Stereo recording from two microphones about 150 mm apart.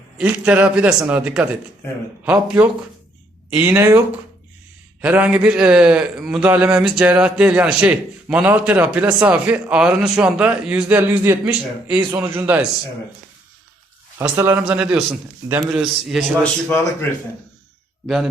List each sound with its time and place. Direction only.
0.2 s a man's voice: 10° right (ahead or behind)
14.2 s a man's voice: 15° right (ahead or behind)
14.6 s a man's voice: 5° right (ahead or behind)
15.7 s a man's voice: 5° right (ahead or behind)
16.4 s a man's voice: 10° left (ahead or behind)